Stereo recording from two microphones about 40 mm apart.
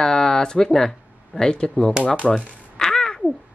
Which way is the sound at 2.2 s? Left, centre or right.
Centre.